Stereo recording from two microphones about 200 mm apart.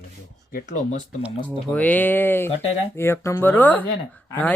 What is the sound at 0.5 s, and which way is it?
Speech, 35° left (ahead or behind).